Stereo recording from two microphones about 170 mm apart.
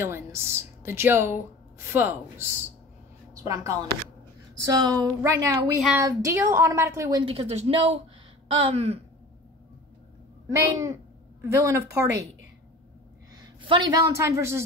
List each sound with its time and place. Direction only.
0.0 s a woman's voice: 15° right (ahead or behind)
5.8 s speech: 5° right (ahead or behind)
6.0 s a woman's voice: 15° right (ahead or behind)
7.2 s speech: 35° right (ahead or behind)
10.5 s a woman's voice: 15° right (ahead or behind)
13.3 s a woman's voice: 30° right (ahead or behind)